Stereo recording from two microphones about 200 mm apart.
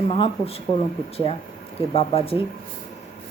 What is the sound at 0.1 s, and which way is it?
Speech, 30° left (ahead or behind).